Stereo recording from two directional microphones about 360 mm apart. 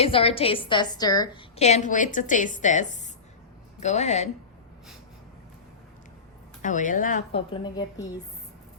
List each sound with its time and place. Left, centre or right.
0.0 s a woman's voice: centre
6.6 s speech: left